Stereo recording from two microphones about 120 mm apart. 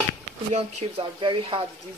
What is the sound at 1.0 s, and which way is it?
Speech, 50° right (ahead or behind).